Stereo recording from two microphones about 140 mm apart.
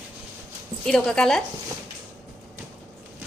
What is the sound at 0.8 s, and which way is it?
Speech, 5° left (ahead or behind).